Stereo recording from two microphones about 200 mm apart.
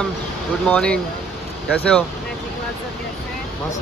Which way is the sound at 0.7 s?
5° left (ahead or behind).